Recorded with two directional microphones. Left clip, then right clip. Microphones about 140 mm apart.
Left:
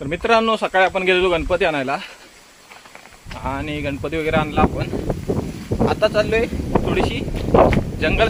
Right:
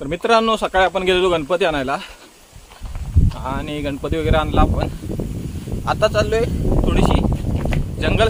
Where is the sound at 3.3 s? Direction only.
10° right (ahead or behind).